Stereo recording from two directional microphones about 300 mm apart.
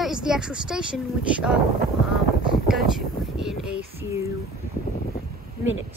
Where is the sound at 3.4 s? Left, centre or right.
Centre.